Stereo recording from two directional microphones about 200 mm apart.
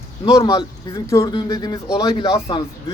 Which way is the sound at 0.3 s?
20° left (ahead or behind).